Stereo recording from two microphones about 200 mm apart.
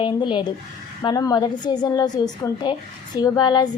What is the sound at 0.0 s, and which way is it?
A woman's voice, 25° left (ahead or behind).